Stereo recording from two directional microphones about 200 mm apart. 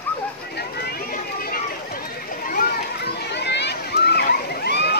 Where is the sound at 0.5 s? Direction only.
50° left (ahead or behind).